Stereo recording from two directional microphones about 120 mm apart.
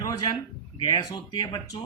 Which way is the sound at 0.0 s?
35° left (ahead or behind).